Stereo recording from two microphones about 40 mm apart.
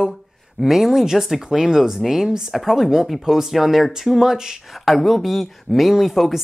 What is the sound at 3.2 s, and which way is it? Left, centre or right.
Speech, centre.